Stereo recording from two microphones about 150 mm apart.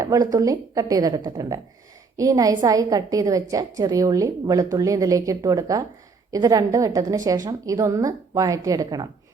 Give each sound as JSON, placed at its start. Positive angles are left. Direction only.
{"t": 0.0, "sound": "a woman's voice", "side_deg": -25}